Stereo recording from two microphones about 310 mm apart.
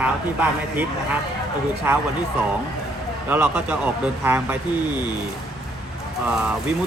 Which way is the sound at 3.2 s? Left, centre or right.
Centre.